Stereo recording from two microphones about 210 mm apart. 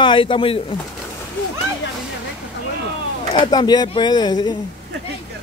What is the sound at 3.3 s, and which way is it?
Speech, 20° left (ahead or behind).